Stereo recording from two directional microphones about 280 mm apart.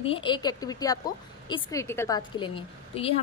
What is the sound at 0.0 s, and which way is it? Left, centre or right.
A woman's voice, centre.